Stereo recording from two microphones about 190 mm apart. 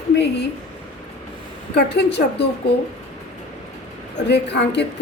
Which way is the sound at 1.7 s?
60° left (ahead or behind).